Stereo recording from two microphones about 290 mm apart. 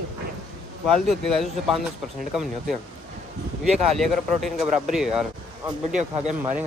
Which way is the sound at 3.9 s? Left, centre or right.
Centre.